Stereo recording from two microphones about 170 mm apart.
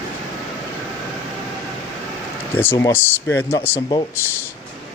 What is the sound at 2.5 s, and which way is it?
Speech, 15° left (ahead or behind).